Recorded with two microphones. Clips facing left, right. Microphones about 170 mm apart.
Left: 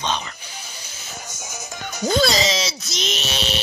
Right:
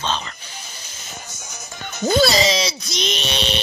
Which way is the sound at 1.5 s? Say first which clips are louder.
Left 2 dB; 10° left (ahead or behind).